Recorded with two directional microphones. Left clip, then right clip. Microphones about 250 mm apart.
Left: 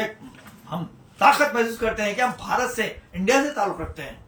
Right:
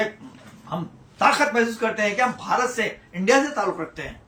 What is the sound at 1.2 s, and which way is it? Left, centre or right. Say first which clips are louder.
Speech: left 1 dB; centre.